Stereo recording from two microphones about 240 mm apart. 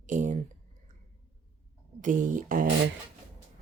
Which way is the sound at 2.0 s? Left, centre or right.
Right.